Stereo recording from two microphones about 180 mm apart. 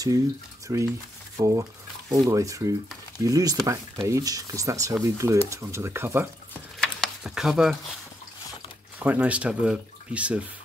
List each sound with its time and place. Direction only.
0.7 s speech: 20° right (ahead or behind)
6.8 s a sound: centre (ahead or behind)
9.0 s speech: 10° right (ahead or behind)